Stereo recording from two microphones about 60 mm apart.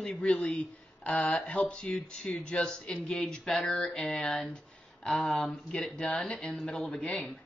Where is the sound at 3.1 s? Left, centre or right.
Centre.